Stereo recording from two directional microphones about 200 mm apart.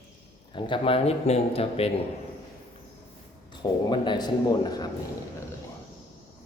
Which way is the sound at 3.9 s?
20° left (ahead or behind).